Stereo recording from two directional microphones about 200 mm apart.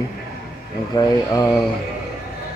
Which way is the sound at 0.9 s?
20° left (ahead or behind).